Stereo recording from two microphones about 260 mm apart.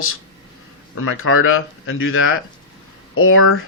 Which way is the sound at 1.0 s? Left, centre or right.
Left.